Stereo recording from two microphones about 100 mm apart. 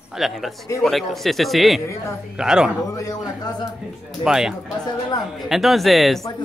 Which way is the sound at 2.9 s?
40° left (ahead or behind).